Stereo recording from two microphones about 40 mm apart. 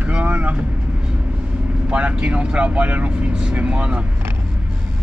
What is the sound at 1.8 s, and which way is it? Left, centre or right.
Speech, right.